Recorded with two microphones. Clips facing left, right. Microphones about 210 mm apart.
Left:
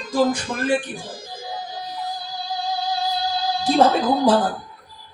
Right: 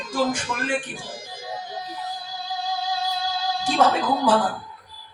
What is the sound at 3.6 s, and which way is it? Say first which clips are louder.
Speech: left 4 dB; 35° left (ahead or behind).